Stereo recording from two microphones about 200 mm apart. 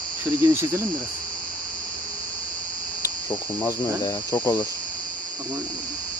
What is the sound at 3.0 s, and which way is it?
Cricket, 15° left (ahead or behind).